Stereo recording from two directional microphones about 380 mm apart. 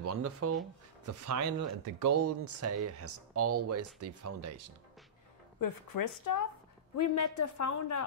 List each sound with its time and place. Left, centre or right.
0.0 s speech: right
5.6 s a woman's voice: left